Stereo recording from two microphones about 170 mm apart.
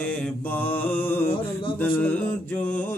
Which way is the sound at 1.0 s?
10° left (ahead or behind).